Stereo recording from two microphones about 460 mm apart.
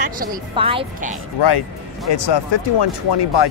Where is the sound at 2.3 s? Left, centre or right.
Left.